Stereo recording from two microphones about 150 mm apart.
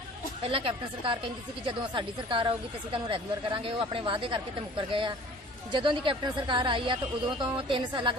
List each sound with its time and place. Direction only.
0.5 s speech: 35° right (ahead or behind)